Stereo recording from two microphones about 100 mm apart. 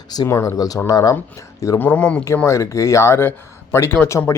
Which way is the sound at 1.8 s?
15° left (ahead or behind).